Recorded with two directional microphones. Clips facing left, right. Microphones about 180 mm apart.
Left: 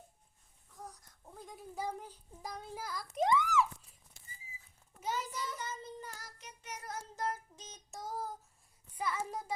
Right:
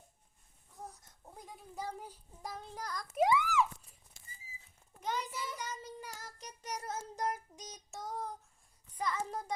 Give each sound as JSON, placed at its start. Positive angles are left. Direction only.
{"t": 1.7, "sound": "a sound", "side_deg": 10}
{"t": 2.4, "sound": "child singing", "side_deg": 0}
{"t": 3.2, "sound": "a sound", "side_deg": -10}
{"t": 4.9, "sound": "a child's voice", "side_deg": 5}
{"t": 5.3, "sound": "child singing", "side_deg": -10}
{"t": 6.4, "sound": "child singing", "side_deg": -40}
{"t": 6.8, "sound": "child singing", "side_deg": -20}
{"t": 7.9, "sound": "child singing", "side_deg": 0}
{"t": 9.0, "sound": "a child's voice", "side_deg": 10}